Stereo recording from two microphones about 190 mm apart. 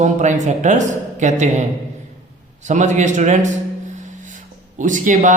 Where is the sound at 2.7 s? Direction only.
40° right (ahead or behind).